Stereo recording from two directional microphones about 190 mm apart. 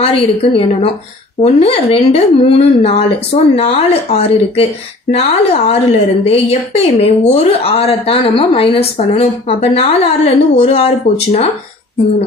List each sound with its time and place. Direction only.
0.0 s a woman's voice: 30° left (ahead or behind)